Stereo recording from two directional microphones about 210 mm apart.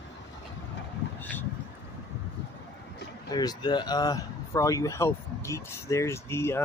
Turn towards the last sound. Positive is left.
turn(degrees=10)  # may be behind; listen again after turning